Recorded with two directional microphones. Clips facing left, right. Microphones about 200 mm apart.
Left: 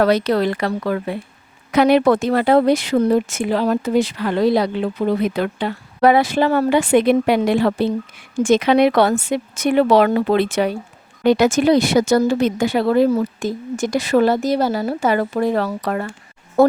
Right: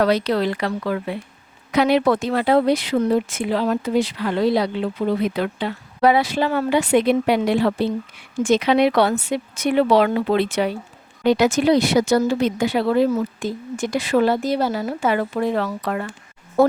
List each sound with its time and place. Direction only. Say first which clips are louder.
0.0 s speech: left 3 dB; 50° left (ahead or behind)
13.1 s a woman's voice: left 3 dB; 35° left (ahead or behind)